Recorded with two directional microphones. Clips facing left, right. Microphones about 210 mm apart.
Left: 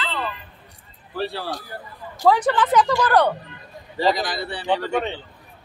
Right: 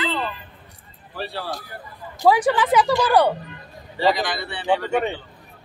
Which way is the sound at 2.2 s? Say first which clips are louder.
Right 1 dB; 10° right (ahead or behind).